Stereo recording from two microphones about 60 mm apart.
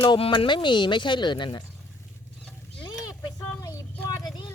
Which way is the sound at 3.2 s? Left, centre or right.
Left.